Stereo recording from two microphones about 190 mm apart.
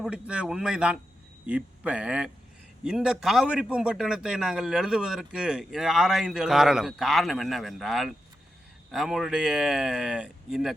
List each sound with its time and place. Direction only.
0.0 s a man's voice: 5° right (ahead or behind)